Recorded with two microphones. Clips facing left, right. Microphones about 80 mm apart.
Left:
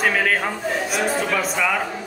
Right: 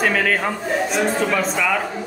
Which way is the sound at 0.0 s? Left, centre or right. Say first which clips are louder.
Right 1 dB; centre.